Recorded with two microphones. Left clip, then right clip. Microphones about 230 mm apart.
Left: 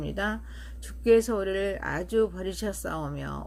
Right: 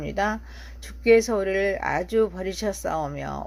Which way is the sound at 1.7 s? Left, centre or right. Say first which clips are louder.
Right 5 dB; centre.